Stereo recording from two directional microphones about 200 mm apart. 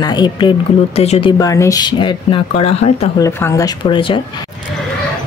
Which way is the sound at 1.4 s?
15° left (ahead or behind).